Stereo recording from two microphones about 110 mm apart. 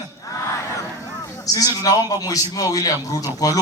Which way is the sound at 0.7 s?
35° left (ahead or behind).